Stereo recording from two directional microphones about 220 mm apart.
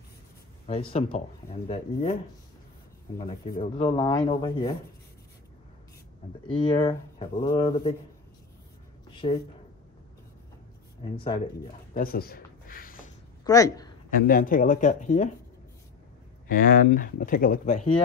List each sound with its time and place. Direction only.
0.7 s speech: 25° left (ahead or behind)
3.7 s speech: 25° left (ahead or behind)
6.4 s speech: 25° left (ahead or behind)
9.1 s a sound: 25° left (ahead or behind)
11.1 s speech: 25° left (ahead or behind)
11.9 s a sound: 40° left (ahead or behind)
13.4 s speech: 15° left (ahead or behind)
14.1 s speech: 40° left (ahead or behind)
16.4 s speech: 40° left (ahead or behind)